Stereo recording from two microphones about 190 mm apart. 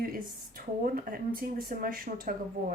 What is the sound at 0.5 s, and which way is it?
A woman's voice, 50° right (ahead or behind).